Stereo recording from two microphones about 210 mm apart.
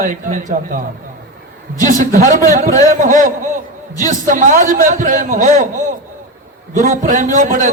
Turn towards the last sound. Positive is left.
turn(degrees=-40)  # may be behind; listen again after turning